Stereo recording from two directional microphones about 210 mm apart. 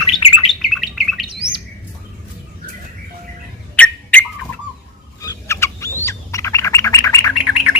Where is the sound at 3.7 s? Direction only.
5° left (ahead or behind).